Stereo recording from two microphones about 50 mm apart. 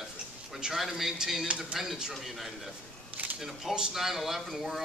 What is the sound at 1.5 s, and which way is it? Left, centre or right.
Speech, right.